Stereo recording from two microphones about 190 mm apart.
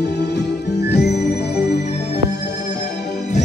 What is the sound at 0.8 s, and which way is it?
Music, 60° left (ahead or behind).